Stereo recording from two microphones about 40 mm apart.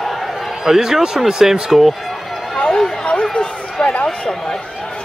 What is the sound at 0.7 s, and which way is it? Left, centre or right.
A man's voice, centre.